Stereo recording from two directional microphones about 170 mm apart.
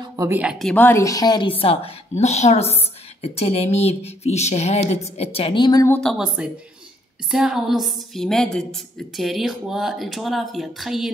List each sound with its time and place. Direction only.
0.0 s a sound: 20° right (ahead or behind)
0.4 s a woman's voice: centre (ahead or behind); by 5.9 s 25° left (ahead or behind)
5.9 s speech: 5° left (ahead or behind)